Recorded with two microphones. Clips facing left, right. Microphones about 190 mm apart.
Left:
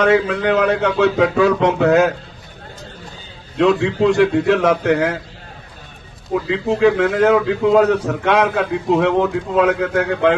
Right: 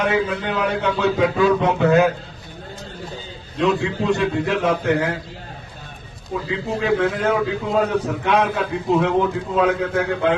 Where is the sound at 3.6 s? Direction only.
80° left.